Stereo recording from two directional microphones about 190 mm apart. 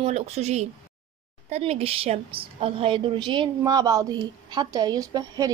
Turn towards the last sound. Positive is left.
turn(degrees=-20)  # may be behind; listen again after turning